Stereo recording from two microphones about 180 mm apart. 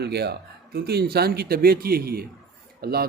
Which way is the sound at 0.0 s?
65° right (ahead or behind).